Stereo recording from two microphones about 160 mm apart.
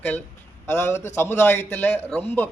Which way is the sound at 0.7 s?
15° left (ahead or behind).